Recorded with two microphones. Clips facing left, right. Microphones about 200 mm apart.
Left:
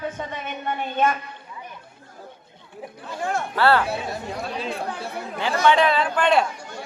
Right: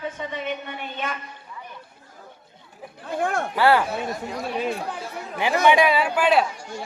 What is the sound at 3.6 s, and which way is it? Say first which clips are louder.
Speech: right 1 dB; 15° right (ahead or behind).